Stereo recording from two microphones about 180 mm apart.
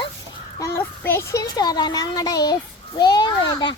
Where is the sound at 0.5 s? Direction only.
15° left (ahead or behind).